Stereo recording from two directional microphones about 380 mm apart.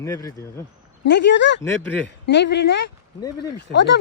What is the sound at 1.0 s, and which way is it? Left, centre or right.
Speech, left.